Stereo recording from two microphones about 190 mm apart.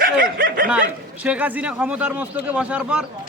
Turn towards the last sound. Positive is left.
turn(degrees=-5)  # may be behind; listen again after turning